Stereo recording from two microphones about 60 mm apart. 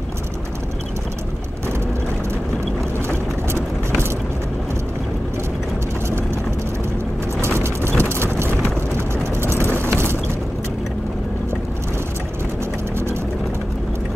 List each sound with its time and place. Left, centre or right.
7.4 s vehicle: right